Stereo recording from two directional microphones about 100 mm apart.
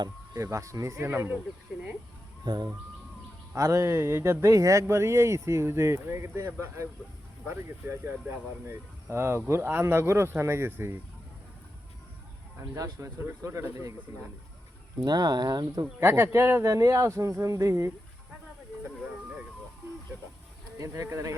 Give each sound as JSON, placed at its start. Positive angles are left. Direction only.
{"t": 0.3, "sound": "speech", "side_deg": -30}
{"t": 2.4, "sound": "speech", "side_deg": -45}
{"t": 3.5, "sound": "speech", "side_deg": -30}
{"t": 12.7, "sound": "speech", "side_deg": -35}
{"t": 15.0, "sound": "speech", "side_deg": -40}
{"t": 15.8, "sound": "speech", "side_deg": -25}
{"t": 18.9, "sound": "a sound", "side_deg": -5}
{"t": 20.7, "sound": "speech", "side_deg": -35}